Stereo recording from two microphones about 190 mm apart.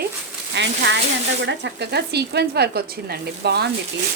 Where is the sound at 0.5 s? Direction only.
65° right (ahead or behind).